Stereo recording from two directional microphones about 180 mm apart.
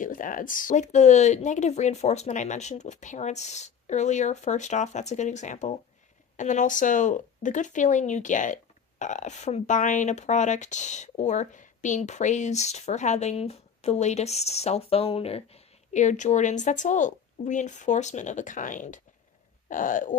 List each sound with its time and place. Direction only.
0.0 s speech: 50° left (ahead or behind)